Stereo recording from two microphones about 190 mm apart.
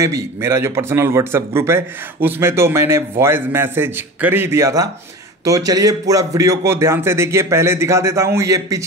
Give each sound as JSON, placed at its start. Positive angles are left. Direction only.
{"t": 0.0, "sound": "speech", "side_deg": -15}